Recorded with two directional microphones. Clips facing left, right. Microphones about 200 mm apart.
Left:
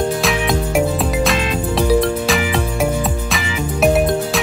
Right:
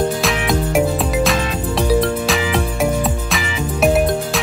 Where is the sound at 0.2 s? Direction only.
Centre (ahead or behind).